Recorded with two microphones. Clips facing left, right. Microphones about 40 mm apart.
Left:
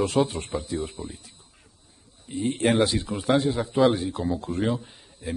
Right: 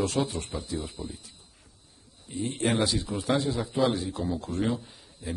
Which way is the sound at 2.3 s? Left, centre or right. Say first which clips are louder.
Left 5 dB; left.